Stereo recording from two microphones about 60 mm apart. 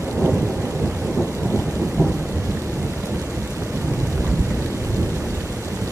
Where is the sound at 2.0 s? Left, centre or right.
Right.